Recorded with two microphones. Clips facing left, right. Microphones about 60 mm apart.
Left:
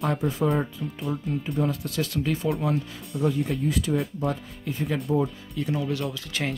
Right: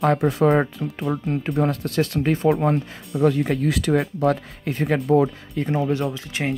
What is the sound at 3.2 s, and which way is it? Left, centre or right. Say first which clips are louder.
Speech: right 6 dB; right.